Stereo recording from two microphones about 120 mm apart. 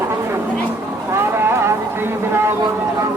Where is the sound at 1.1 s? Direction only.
20° right (ahead or behind).